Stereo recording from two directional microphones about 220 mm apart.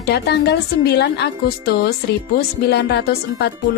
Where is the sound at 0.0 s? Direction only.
50° left (ahead or behind).